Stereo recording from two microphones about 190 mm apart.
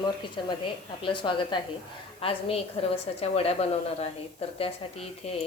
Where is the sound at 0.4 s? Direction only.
25° left (ahead or behind).